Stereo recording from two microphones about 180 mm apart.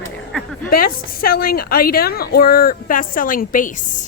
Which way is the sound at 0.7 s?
55° left (ahead or behind).